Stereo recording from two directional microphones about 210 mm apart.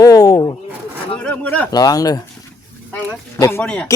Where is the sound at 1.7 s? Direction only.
20° left (ahead or behind).